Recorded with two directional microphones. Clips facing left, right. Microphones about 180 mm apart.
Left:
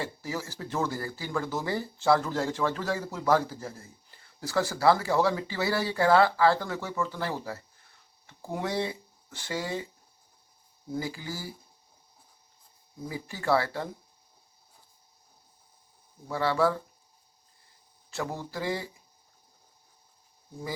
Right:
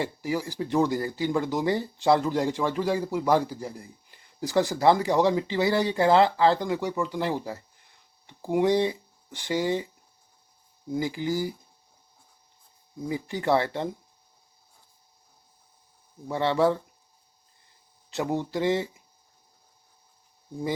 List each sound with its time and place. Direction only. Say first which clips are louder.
0.0 s speech: right 6 dB; 15° right (ahead or behind)
10.9 s speech: right 7 dB; 20° right (ahead or behind)
13.1 s speech: right 3 dB; 20° right (ahead or behind)
16.3 s speech: right 3 dB; 20° right (ahead or behind)
18.1 s speech: right 7 dB; 20° right (ahead or behind)